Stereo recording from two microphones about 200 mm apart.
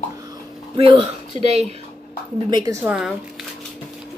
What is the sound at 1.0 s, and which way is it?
Speech, 35° right (ahead or behind).